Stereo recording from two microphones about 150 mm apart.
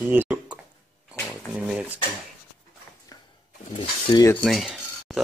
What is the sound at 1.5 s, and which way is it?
Speech, 5° right (ahead or behind).